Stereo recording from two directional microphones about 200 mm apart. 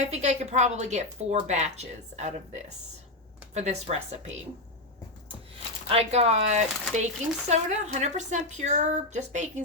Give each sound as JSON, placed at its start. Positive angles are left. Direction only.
{"t": 0.0, "sound": "speech", "side_deg": -35}
{"t": 3.5, "sound": "speech", "side_deg": -35}
{"t": 5.9, "sound": "speech", "side_deg": -30}